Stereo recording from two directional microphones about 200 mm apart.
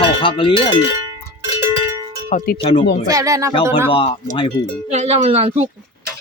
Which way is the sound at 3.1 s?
15° right (ahead or behind).